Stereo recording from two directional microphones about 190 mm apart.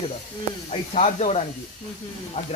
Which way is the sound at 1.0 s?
35° left (ahead or behind).